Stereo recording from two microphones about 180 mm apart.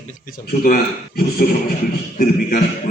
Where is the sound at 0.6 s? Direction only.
55° left (ahead or behind).